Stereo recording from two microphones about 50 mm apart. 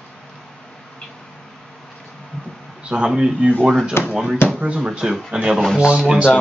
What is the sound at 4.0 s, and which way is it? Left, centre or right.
Speech, left.